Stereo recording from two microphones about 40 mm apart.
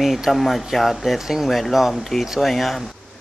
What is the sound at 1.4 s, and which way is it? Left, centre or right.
Speech, centre.